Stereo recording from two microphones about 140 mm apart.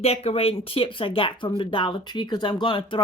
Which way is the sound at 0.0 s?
45° left (ahead or behind).